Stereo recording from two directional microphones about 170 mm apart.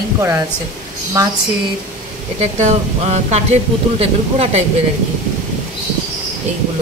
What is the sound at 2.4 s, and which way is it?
Speech, 40° right (ahead or behind).